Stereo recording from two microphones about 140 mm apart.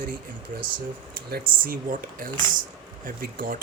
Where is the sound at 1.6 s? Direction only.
85° right.